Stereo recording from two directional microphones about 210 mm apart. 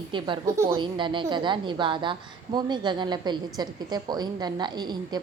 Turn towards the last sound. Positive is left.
turn(degrees=-20)  # may be behind; listen again after turning